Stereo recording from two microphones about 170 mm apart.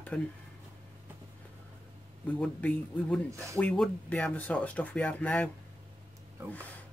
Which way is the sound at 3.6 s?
10° left (ahead or behind).